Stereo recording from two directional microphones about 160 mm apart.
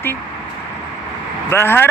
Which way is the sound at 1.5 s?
15° left (ahead or behind).